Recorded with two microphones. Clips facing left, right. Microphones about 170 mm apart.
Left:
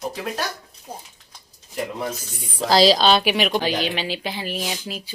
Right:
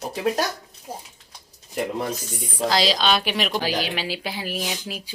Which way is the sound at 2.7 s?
35° left (ahead or behind).